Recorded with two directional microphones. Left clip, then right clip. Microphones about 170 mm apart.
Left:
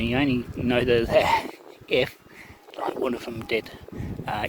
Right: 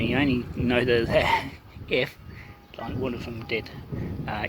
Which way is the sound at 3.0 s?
40° left (ahead or behind).